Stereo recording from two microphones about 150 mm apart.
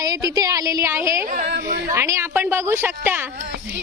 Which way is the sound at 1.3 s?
75° right (ahead or behind).